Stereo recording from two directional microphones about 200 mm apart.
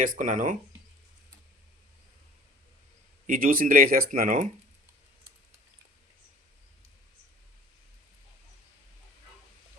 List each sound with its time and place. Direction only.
0.0 s speech: 40° right (ahead or behind)
3.2 s speech: 45° right (ahead or behind)